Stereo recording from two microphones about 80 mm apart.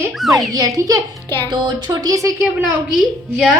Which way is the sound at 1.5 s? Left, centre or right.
Right.